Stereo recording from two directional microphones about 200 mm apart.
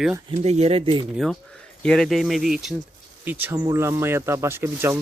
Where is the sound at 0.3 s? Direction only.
35° right (ahead or behind).